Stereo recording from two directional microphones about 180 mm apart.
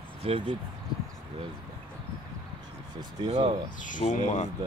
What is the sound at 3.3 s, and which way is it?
Speech, 35° right (ahead or behind).